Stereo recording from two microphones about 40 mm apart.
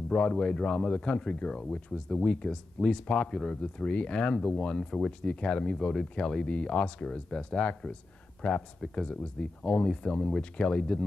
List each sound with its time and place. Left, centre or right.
0.1 s speech: left
8.4 s speech: left